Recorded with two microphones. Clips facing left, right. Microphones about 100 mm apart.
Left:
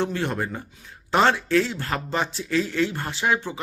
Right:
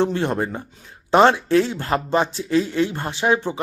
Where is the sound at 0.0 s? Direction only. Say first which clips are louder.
Right 5 dB; 25° right (ahead or behind).